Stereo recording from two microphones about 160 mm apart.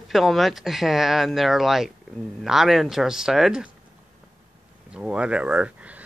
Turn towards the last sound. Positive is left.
turn(degrees=-10)  # may be behind; listen again after turning